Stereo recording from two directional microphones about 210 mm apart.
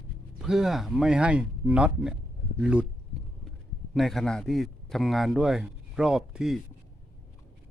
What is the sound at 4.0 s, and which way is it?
A man's voice, centre (ahead or behind).